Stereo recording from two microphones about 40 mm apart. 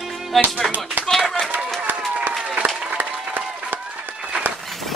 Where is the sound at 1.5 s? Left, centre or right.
Right.